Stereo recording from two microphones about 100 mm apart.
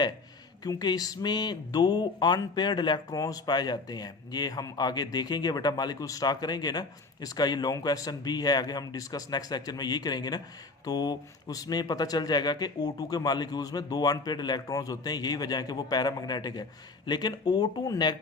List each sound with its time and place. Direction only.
0.6 s speech: 40° left (ahead or behind)